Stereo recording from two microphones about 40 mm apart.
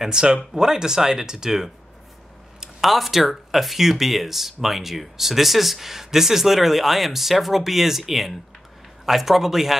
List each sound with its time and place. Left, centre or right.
0.0 s speech: centre
2.8 s speech: centre